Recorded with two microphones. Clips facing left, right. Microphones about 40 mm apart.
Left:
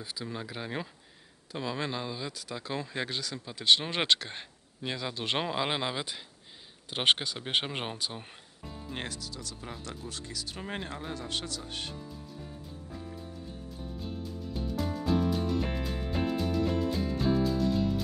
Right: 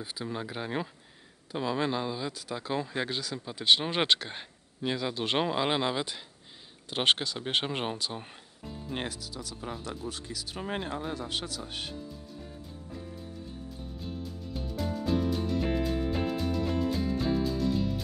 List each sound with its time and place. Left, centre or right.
0.0 s speech: right; by 8.9 s centre
8.9 s speech: centre
11.1 s speech: centre
13.9 s music: centre